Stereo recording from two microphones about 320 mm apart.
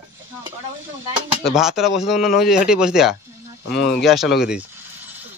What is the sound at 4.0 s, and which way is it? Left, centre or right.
Speech, centre.